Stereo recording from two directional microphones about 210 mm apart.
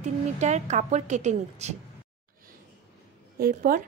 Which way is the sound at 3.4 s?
45° right (ahead or behind).